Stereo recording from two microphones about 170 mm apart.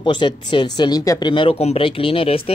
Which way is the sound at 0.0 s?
30° left (ahead or behind).